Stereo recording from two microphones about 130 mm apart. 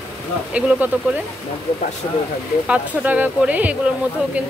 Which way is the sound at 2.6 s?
10° right (ahead or behind).